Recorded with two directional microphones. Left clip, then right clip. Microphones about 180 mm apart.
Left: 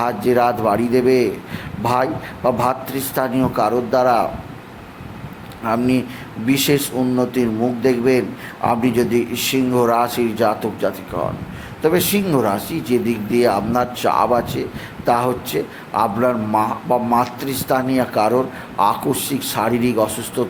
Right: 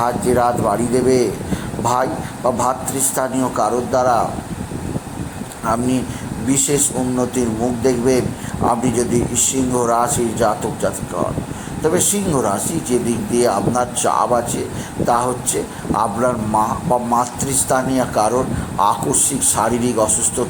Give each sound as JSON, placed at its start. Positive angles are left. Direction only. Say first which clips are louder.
{"t": 0.0, "sound": "speech", "louder": "even", "side_deg": 20}
{"t": 5.6, "sound": "speech", "louder": "even", "side_deg": 15}